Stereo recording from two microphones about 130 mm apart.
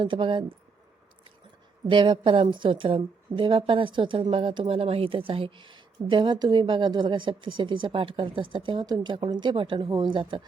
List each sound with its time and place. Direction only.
0.0 s a woman's voice: 40° right (ahead or behind)
1.9 s a woman's voice: 40° right (ahead or behind)